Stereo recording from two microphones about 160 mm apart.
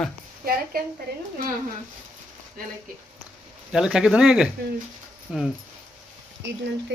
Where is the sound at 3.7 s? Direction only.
5° right (ahead or behind).